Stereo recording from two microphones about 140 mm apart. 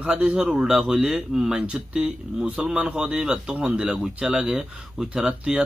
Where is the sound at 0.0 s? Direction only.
5° right (ahead or behind).